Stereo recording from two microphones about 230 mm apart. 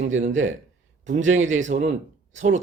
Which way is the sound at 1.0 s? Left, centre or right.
Right.